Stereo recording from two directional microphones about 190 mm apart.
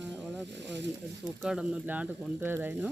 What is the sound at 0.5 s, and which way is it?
Snake, 70° right (ahead or behind).